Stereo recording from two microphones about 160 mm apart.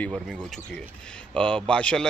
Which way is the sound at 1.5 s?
5° left (ahead or behind).